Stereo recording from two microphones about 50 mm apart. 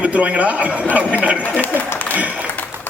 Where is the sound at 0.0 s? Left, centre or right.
Right.